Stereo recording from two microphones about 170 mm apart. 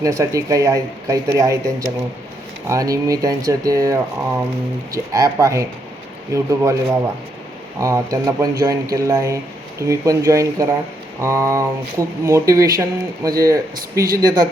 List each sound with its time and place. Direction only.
0.0 s speech: 20° right (ahead or behind)
5.1 s speech: 20° right (ahead or behind)